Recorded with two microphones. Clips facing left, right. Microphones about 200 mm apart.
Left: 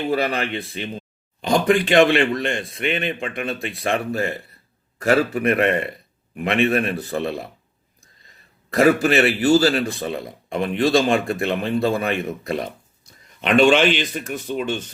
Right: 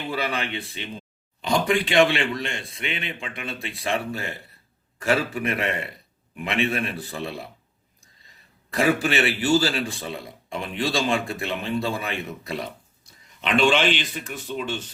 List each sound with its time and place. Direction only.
0.1 s speech: 50° left (ahead or behind)
8.7 s speech: 45° left (ahead or behind)